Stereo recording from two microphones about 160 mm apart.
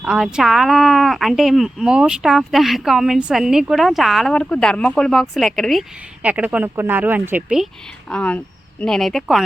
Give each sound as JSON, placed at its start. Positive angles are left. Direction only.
{"t": 0.0, "sound": "speech", "side_deg": -5}
{"t": 8.1, "sound": "speech", "side_deg": 10}